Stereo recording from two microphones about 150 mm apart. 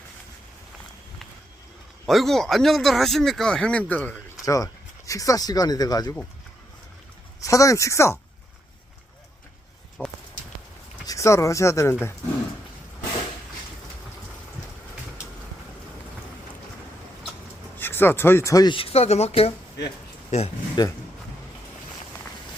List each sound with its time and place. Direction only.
2.0 s speech: centre (ahead or behind)
4.4 s speech: 20° left (ahead or behind)
7.4 s speech: 20° left (ahead or behind)
10.0 s a sound: 10° left (ahead or behind)
11.0 s speech: 20° left (ahead or behind)
17.7 s speech: 15° left (ahead or behind); by 20.5 s 50° left (ahead or behind)
20.8 s speech: 30° left (ahead or behind)